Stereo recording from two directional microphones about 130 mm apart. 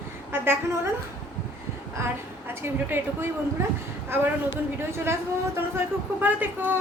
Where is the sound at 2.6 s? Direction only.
20° right (ahead or behind).